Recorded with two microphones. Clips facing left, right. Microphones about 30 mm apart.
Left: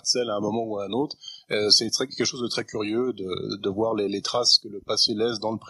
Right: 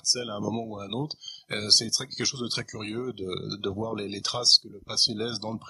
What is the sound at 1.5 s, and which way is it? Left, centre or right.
Speech, centre.